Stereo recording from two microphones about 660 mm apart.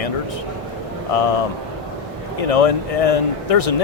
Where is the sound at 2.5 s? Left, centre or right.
Left.